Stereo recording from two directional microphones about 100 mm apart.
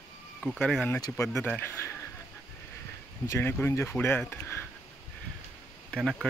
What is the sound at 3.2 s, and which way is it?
Speech, 25° left (ahead or behind).